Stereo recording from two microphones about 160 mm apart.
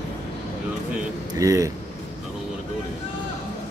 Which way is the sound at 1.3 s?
20° right (ahead or behind).